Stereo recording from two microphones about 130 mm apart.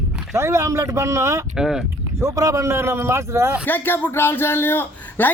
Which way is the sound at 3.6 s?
15° left (ahead or behind).